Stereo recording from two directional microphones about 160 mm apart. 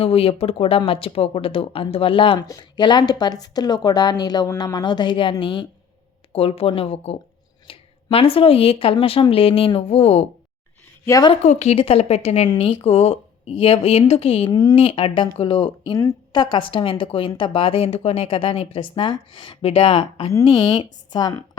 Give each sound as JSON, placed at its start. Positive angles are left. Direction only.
{"t": 0.0, "sound": "a woman's voice", "side_deg": 40}
{"t": 11.0, "sound": "a woman's voice", "side_deg": 20}
{"t": 11.4, "sound": "speech", "side_deg": 40}
{"t": 14.5, "sound": "a woman's voice", "side_deg": 25}
{"t": 14.8, "sound": "a woman's voice", "side_deg": 35}